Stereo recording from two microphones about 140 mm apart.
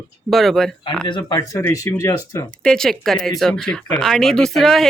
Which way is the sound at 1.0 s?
35° left (ahead or behind).